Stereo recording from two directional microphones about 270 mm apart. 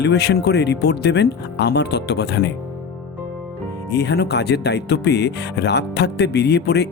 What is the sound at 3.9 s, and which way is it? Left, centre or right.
Speech, left.